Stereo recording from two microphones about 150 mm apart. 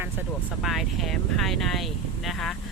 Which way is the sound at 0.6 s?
Centre (ahead or behind).